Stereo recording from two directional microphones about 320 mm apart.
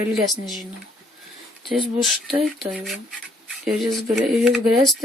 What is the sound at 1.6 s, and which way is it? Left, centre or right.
Speech, centre.